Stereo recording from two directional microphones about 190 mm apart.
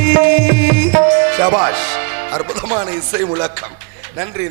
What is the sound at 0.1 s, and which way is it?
Music, 20° right (ahead or behind).